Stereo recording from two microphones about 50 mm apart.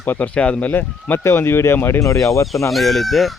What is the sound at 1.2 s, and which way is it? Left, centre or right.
Speech, left.